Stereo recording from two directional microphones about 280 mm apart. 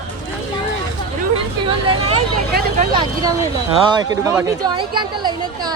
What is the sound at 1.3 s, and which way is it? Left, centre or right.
Speech, centre.